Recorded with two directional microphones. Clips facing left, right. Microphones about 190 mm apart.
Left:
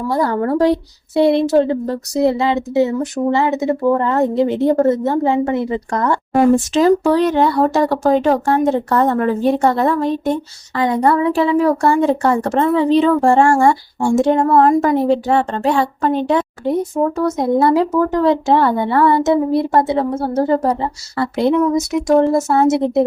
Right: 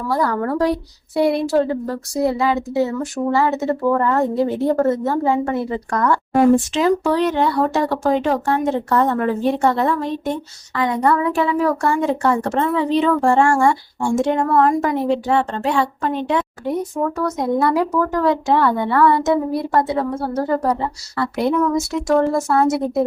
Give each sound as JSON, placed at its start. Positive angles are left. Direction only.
{"t": 0.1, "sound": "speech", "side_deg": 25}
{"t": 6.3, "sound": "a woman's voice", "side_deg": 40}
{"t": 16.9, "sound": "speech", "side_deg": 25}